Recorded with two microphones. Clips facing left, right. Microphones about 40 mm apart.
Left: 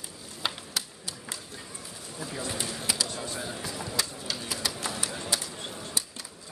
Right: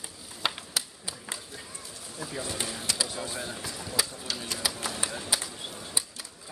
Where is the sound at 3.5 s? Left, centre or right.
Centre.